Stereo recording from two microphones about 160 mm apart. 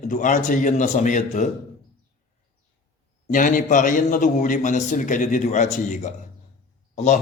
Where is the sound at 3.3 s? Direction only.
55° left (ahead or behind).